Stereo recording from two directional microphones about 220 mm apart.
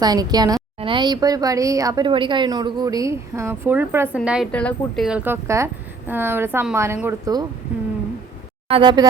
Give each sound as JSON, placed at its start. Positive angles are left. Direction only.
{"t": 0.0, "sound": "speech", "side_deg": -20}
{"t": 8.6, "sound": "speech", "side_deg": -20}